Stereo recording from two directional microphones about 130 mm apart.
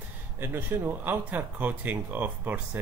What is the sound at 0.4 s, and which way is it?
Speech, 15° right (ahead or behind).